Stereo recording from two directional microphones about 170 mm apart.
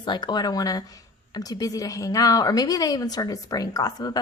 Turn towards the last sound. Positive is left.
turn(degrees=20)  # may be behind; listen again after turning